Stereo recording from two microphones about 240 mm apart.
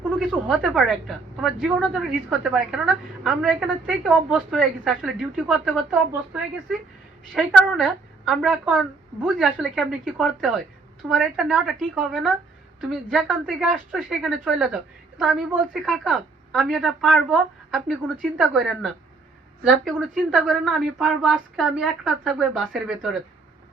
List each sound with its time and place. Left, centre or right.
0.2 s a woman's voice: centre